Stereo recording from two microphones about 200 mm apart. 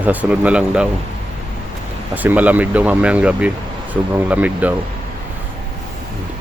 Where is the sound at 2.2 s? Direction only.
10° right (ahead or behind).